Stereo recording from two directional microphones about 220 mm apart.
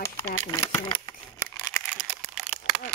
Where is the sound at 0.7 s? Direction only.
20° left (ahead or behind).